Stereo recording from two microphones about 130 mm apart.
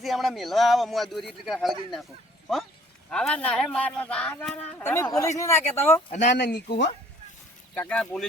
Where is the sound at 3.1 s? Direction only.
10° left (ahead or behind).